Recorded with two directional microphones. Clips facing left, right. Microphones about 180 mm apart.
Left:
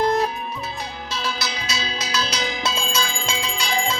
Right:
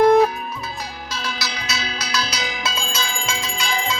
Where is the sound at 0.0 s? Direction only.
55° right (ahead or behind).